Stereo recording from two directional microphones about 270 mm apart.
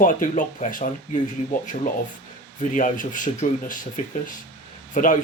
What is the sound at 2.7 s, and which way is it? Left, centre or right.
Speech, left.